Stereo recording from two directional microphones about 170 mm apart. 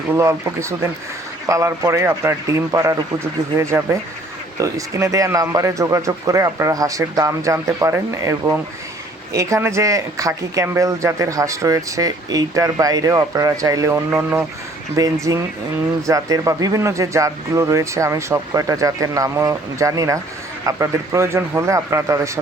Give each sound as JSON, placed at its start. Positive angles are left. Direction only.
{"t": 0.1, "sound": "a man's voice", "side_deg": -15}